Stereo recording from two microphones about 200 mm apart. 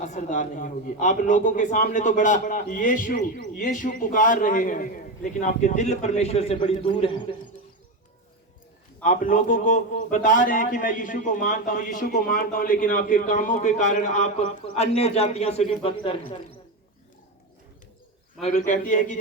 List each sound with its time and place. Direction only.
0.0 s a man's voice: 40° left (ahead or behind)
9.0 s a man's voice: 40° left (ahead or behind)
18.4 s a man's voice: 40° left (ahead or behind)